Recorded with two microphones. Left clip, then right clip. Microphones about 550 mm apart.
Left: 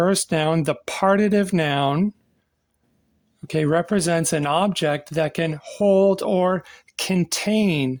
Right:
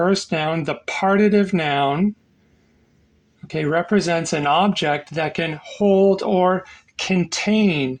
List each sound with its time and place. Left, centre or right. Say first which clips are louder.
0.0 s speech: right 1 dB; left
3.4 s speech: even; left